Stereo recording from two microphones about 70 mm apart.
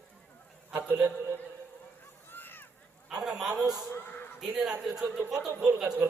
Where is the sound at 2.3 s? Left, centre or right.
Left.